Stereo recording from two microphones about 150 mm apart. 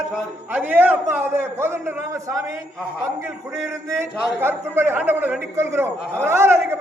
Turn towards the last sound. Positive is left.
turn(degrees=-15)  # may be behind; listen again after turning